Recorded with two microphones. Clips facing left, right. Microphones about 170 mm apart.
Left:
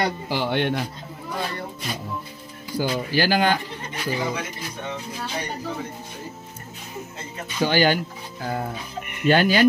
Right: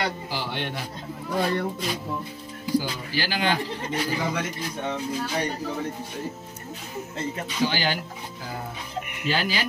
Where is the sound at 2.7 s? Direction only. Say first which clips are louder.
Left 4 dB; 50° left (ahead or behind).